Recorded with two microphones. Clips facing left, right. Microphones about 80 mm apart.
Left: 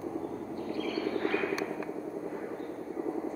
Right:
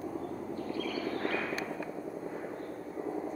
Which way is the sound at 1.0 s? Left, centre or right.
Centre.